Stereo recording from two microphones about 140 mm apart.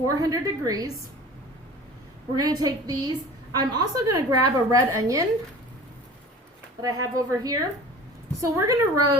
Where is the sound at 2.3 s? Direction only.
25° right (ahead or behind).